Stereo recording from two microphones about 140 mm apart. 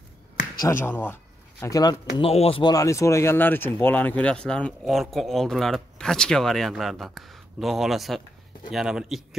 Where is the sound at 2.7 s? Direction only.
20° left (ahead or behind).